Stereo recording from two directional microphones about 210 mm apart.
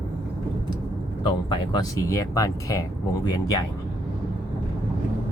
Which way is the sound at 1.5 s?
20° left (ahead or behind).